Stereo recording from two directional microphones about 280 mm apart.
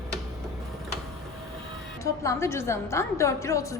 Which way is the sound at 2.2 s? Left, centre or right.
Centre.